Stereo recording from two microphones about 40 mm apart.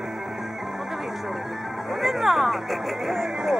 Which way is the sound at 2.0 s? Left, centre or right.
Centre.